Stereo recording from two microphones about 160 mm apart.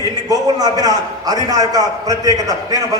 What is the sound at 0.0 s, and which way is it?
A man's voice, 25° right (ahead or behind).